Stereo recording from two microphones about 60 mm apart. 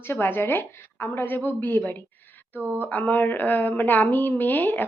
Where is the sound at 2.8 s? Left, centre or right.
Left.